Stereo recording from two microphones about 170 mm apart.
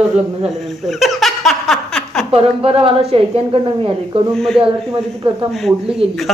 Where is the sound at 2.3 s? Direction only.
35° right (ahead or behind).